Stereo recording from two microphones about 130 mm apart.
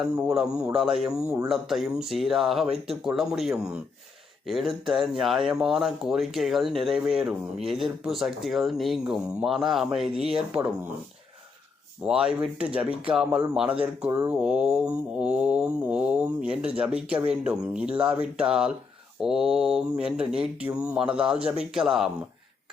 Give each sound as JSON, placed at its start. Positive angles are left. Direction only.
{"t": 0.3, "sound": "speech", "side_deg": -5}
{"t": 12.0, "sound": "mantra", "side_deg": -5}
{"t": 13.8, "sound": "speech", "side_deg": -20}
{"t": 14.3, "sound": "mantra", "side_deg": -5}
{"t": 19.2, "sound": "speech", "side_deg": -5}
{"t": 20.7, "sound": "mantra", "side_deg": -10}
{"t": 21.7, "sound": "speech", "side_deg": -5}